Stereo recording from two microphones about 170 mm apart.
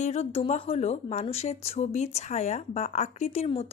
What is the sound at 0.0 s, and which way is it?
Speech, 40° left (ahead or behind).